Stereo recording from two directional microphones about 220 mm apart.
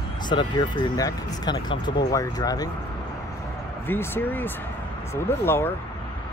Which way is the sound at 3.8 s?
10° left (ahead or behind).